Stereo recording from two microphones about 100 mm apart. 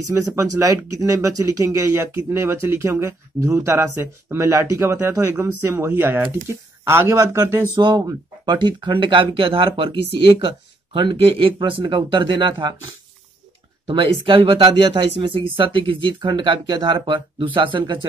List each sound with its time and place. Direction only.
0.1 s speech: 30° right (ahead or behind)
7.8 s speech: 40° right (ahead or behind)
8.5 s speech: 55° right (ahead or behind)
13.8 s speech: 55° right (ahead or behind)
14.7 s speech: 55° right (ahead or behind)